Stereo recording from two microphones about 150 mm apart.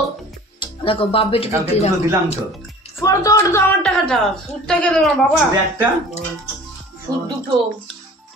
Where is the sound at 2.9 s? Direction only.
20° left (ahead or behind).